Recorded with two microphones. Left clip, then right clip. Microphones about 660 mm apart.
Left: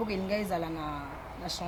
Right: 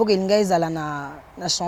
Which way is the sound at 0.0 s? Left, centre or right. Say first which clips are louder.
Right 14 dB; right.